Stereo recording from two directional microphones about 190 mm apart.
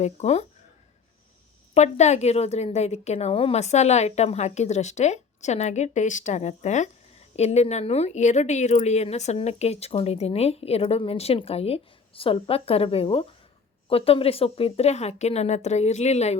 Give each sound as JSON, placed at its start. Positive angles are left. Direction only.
{"t": 0.0, "sound": "speech", "side_deg": 35}
{"t": 1.7, "sound": "speech", "side_deg": 35}